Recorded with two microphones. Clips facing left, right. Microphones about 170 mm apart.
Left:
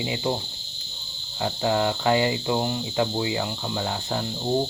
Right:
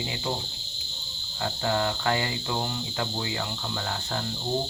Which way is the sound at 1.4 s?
20° left (ahead or behind).